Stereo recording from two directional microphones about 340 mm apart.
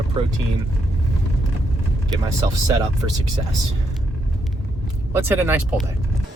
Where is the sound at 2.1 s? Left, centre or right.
Centre.